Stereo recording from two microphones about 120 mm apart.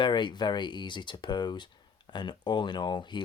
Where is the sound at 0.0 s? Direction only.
40° left (ahead or behind).